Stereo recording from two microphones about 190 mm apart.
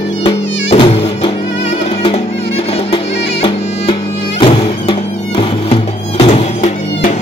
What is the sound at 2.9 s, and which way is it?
Music, 30° left (ahead or behind).